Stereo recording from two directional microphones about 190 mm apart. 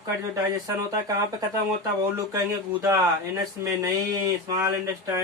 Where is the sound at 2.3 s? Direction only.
15° right (ahead or behind).